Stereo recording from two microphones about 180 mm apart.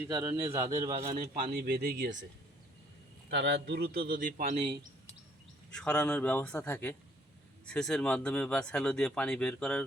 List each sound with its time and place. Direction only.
0.1 s speech: 20° right (ahead or behind)
0.9 s speech: 35° right (ahead or behind)
1.5 s a man's voice: 60° right (ahead or behind); by 2.2 s 80° right
3.2 s a man's voice: 75° right (ahead or behind); by 4.5 s 50° right (ahead or behind)
4.6 s speech: 25° right (ahead or behind)
5.7 s speech: 5° left (ahead or behind)